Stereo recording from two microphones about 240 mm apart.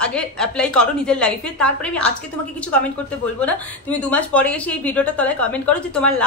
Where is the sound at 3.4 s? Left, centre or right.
Centre.